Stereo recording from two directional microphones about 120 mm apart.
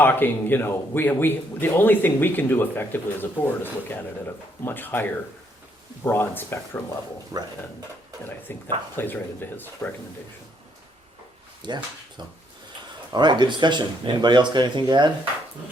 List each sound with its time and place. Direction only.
0.0 s speech: 15° left (ahead or behind)
7.3 s speech: 25° right (ahead or behind)
8.2 s speech: 15° left (ahead or behind)
11.6 s speech: 40° right (ahead or behind)